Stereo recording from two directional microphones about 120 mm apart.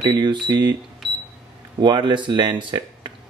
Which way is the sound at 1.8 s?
40° right (ahead or behind).